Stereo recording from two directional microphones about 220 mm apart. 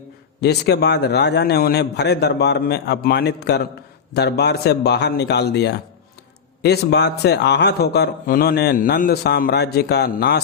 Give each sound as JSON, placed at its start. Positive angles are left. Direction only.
{"t": 0.4, "sound": "a man's voice", "side_deg": 50}